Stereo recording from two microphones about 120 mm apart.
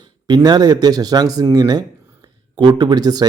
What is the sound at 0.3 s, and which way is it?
Speech, 35° right (ahead or behind).